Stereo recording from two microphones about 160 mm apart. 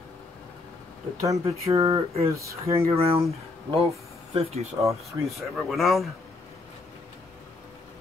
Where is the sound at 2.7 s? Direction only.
40° right (ahead or behind).